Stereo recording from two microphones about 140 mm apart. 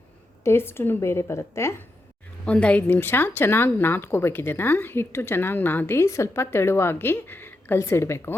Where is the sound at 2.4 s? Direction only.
10° left (ahead or behind).